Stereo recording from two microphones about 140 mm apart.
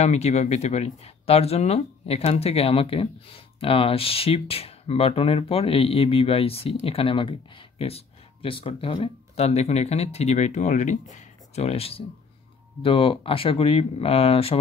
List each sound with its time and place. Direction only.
0.0 s speech: 50° left (ahead or behind)